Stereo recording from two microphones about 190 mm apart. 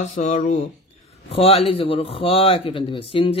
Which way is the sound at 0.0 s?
40° left (ahead or behind).